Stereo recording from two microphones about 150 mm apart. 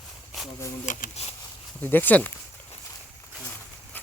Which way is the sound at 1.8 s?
10° left (ahead or behind).